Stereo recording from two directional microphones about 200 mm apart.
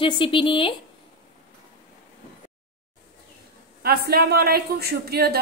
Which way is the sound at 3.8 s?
50° right (ahead or behind).